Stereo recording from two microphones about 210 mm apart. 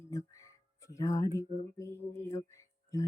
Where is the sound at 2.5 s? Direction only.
15° left (ahead or behind).